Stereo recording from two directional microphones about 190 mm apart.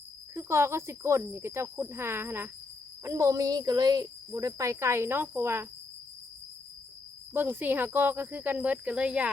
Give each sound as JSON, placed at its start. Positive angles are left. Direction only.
{"t": 0.3, "sound": "speech", "side_deg": -15}
{"t": 7.3, "sound": "speech", "side_deg": -10}